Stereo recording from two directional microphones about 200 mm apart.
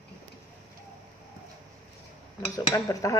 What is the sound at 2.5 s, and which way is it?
Speech, 15° left (ahead or behind).